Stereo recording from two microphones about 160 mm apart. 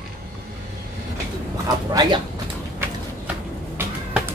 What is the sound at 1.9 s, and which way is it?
Speech, 25° right (ahead or behind).